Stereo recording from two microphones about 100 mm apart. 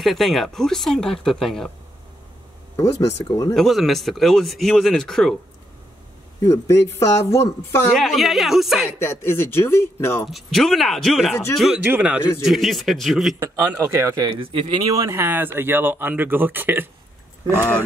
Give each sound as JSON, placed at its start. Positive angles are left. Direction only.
{"t": 0.0, "sound": "speech", "side_deg": 0}
{"t": 2.7, "sound": "speech", "side_deg": 30}
{"t": 3.5, "sound": "speech", "side_deg": 0}
{"t": 6.4, "sound": "speech", "side_deg": 30}
{"t": 7.9, "sound": "speech", "side_deg": 0}
{"t": 9.0, "sound": "speech", "side_deg": 25}
{"t": 10.2, "sound": "speech", "side_deg": 0}
{"t": 11.8, "sound": "speech", "side_deg": -15}
{"t": 12.4, "sound": "speech", "side_deg": 0}
{"t": 13.4, "sound": "speech", "side_deg": -25}
{"t": 14.3, "sound": "speech", "side_deg": -70}
{"t": 14.9, "sound": "speech", "side_deg": -30}